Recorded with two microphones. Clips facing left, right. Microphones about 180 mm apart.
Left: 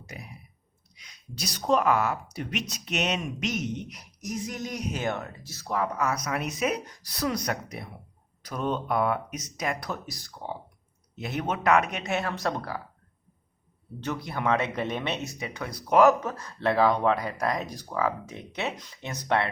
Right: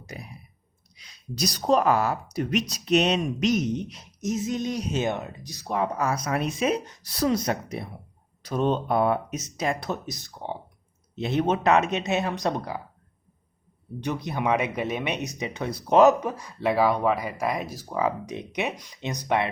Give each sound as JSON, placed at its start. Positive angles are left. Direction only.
{"t": 0.0, "sound": "clicking", "side_deg": -35}
{"t": 0.9, "sound": "speech", "side_deg": -30}
{"t": 14.0, "sound": "speech", "side_deg": -20}
{"t": 17.9, "sound": "speech", "side_deg": -15}